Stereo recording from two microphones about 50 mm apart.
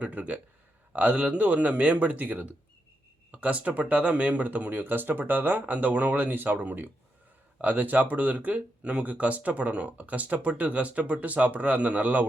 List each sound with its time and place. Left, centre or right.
0.0 s speech: right